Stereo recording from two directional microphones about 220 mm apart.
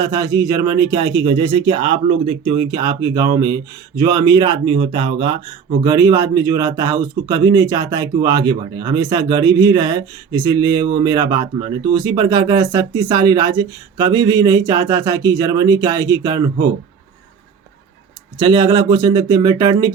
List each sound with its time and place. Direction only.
0.0 s speech: 20° right (ahead or behind)
18.3 s speech: 20° right (ahead or behind)